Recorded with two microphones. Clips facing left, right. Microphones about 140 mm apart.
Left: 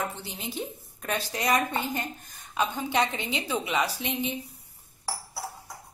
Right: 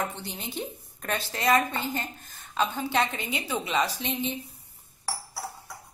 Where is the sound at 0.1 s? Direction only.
5° left (ahead or behind).